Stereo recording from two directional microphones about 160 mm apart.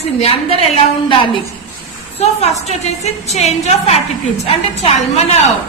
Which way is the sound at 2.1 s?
45° left (ahead or behind).